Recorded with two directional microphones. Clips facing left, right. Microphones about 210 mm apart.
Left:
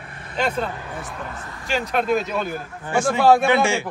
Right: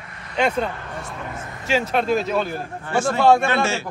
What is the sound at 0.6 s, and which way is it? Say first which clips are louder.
A man's voice: right 1 dB; centre (ahead or behind).